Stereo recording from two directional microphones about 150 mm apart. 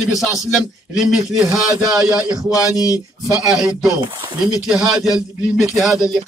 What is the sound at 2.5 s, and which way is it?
Speech, 25° left (ahead or behind).